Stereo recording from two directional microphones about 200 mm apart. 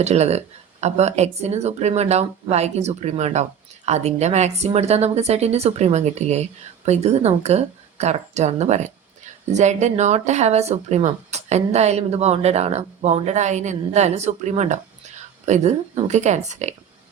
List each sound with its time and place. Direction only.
0.0 s speech: 35° right (ahead or behind)